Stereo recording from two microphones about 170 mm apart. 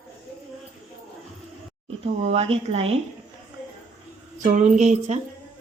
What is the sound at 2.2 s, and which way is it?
Speech, 35° right (ahead or behind).